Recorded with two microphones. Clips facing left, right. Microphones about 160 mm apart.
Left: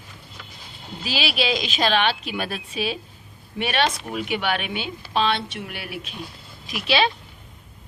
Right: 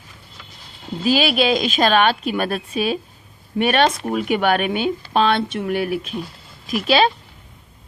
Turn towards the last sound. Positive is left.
turn(degrees=-45)  # may be behind; listen again after turning